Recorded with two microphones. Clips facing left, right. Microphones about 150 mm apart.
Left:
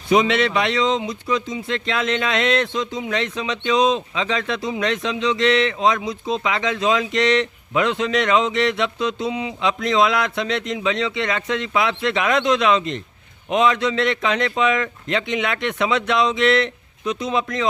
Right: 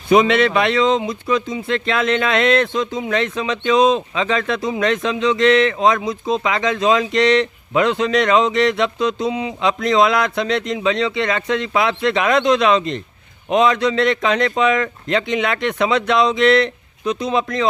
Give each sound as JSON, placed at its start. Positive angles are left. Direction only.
{"t": 0.1, "sound": "a man's voice", "side_deg": -55}